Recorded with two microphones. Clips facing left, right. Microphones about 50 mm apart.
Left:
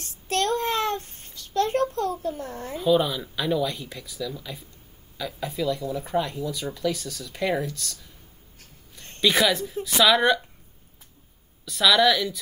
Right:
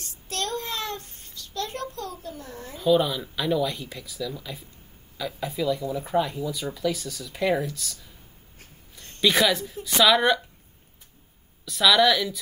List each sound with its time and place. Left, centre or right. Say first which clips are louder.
0.0 s a sound: left 6 dB; left
2.8 s speech: even; centre
9.2 s speech: even; centre
11.6 s speech: even; centre